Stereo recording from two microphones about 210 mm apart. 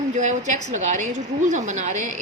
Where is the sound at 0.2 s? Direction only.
35° right (ahead or behind).